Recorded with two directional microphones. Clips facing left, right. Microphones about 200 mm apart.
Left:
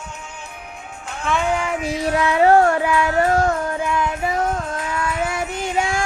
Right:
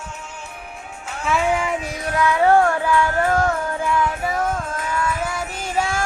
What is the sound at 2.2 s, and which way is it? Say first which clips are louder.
Child singing: left 1 dB; 20° left (ahead or behind).